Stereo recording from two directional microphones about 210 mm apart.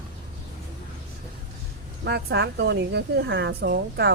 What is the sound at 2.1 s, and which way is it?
A woman's voice, 50° right (ahead or behind).